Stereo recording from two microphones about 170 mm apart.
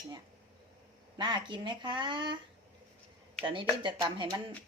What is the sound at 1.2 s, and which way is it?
Speech, 25° right (ahead or behind).